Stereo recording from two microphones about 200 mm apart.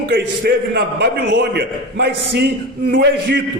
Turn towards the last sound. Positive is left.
turn(degrees=-60)  # may be behind; listen again after turning